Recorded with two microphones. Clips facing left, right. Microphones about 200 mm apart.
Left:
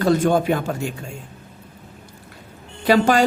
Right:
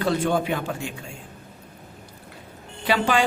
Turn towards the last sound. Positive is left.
turn(degrees=40)  # may be behind; listen again after turning